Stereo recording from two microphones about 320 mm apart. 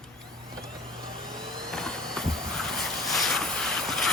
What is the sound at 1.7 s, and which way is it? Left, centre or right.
Vehicle, centre.